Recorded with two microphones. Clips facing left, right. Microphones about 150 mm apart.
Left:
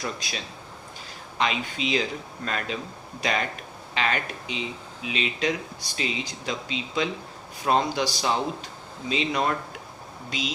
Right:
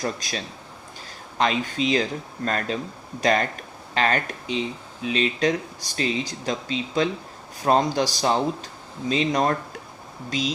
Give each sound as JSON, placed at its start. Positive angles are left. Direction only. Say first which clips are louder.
{"t": 0.0, "sound": "speech", "louder": "right 4 dB", "side_deg": -45}